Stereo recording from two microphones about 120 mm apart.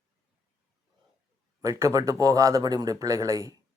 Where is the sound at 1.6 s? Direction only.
25° right (ahead or behind).